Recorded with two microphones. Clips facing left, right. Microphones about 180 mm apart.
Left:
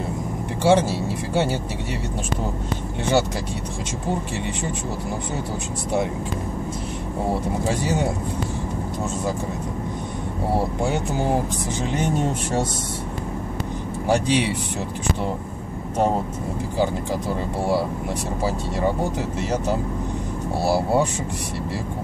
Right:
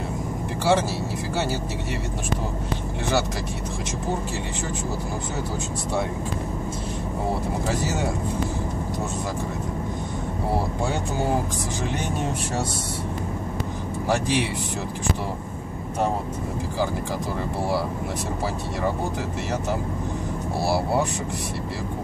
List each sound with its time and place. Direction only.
0.7 s speech: 25° left (ahead or behind)
14.0 s speech: 20° left (ahead or behind)